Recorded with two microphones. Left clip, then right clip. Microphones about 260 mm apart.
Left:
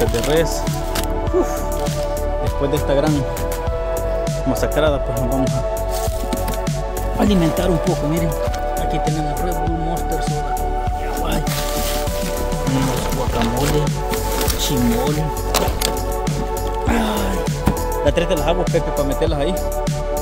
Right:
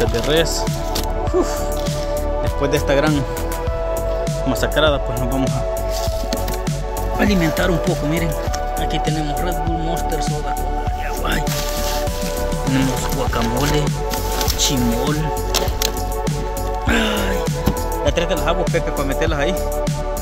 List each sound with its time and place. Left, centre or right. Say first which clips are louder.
2.7 s speech: right 1 dB; centre
4.6 s speech: right 1 dB; centre
7.2 s speech: even; centre
18.0 s speech: left 1 dB; centre
18.6 s speech: left 1 dB; centre